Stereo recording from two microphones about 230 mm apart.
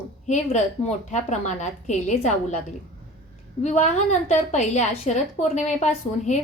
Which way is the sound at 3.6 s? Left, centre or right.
Left.